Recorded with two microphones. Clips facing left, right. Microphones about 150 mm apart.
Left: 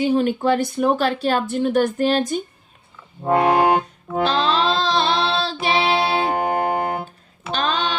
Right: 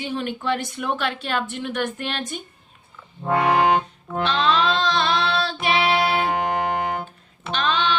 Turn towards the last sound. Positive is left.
turn(degrees=40)  # may be behind; listen again after turning